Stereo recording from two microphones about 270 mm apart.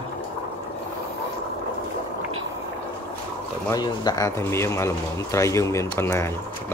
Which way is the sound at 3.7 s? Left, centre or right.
Centre.